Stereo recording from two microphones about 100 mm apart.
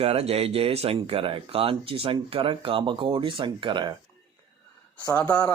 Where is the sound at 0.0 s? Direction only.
90° right; by 3.9 s 50° right (ahead or behind).